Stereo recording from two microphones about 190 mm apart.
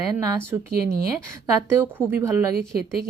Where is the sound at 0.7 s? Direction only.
55° right (ahead or behind).